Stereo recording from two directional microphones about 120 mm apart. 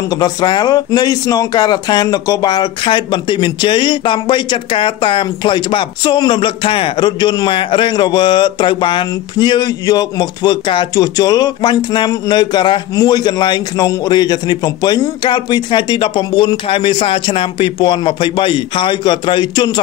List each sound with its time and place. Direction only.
0.1 s speech: 35° left (ahead or behind)